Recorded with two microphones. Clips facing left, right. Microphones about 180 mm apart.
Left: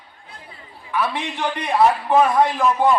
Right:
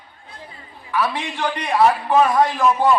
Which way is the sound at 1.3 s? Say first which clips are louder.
Even; 20° left (ahead or behind).